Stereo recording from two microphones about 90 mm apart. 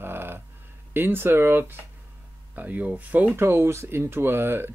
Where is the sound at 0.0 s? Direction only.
25° right (ahead or behind).